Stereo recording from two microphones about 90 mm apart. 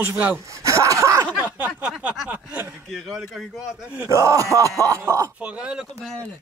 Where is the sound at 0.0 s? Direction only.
20° right (ahead or behind).